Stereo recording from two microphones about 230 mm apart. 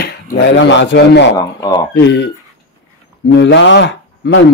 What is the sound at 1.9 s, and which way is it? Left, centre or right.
Speech, left.